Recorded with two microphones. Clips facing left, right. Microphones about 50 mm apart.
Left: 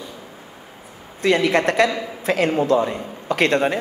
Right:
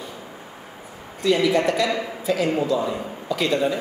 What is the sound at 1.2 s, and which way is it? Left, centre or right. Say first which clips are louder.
A man's voice: left 2 dB; left.